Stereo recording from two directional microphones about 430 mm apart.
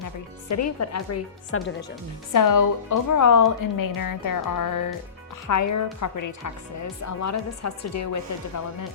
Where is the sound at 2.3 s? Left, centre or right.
Left.